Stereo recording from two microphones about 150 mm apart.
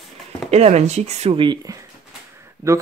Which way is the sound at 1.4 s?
30° right (ahead or behind).